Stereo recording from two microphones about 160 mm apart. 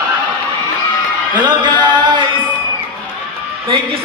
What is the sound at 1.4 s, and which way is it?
Music, 25° right (ahead or behind).